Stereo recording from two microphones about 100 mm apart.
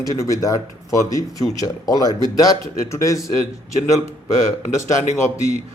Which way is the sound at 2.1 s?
45° right (ahead or behind).